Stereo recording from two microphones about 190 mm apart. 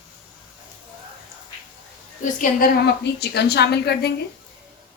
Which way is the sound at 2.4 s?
50° left (ahead or behind).